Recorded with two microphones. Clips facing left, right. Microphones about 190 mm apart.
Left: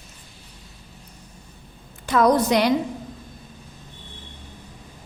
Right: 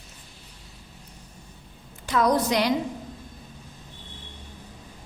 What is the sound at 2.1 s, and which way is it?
Speech, 55° left (ahead or behind).